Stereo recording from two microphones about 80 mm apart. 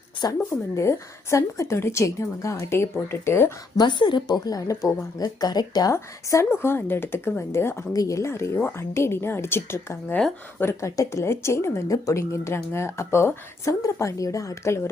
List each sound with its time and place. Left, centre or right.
0.2 s speech: left
0.8 s speech: left
3.8 s a woman's voice: left
4.3 s speech: left
5.9 s speech: left
7.9 s speech: left